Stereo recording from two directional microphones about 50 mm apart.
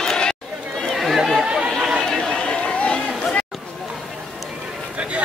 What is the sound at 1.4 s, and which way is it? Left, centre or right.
Chatter, centre.